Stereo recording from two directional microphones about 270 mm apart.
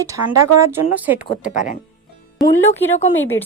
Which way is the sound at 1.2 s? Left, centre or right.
Left.